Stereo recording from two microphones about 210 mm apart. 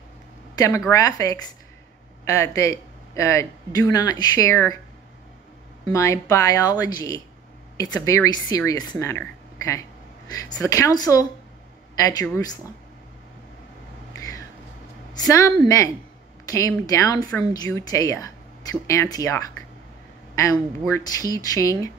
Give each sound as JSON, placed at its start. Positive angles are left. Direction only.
{"t": 0.6, "sound": "speech", "side_deg": 15}
{"t": 5.9, "sound": "speech", "side_deg": 15}
{"t": 15.1, "sound": "speech", "side_deg": 15}
{"t": 20.5, "sound": "speech", "side_deg": 10}